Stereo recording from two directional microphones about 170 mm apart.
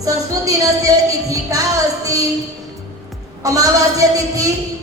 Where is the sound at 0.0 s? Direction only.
20° right (ahead or behind).